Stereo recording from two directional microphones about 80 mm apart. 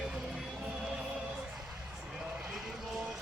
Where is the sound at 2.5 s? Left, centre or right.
Centre.